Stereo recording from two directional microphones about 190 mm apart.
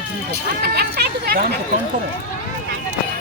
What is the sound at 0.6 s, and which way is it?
Speech, 55° right (ahead or behind).